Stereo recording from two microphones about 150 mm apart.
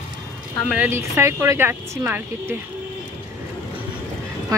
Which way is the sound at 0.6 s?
10° right (ahead or behind).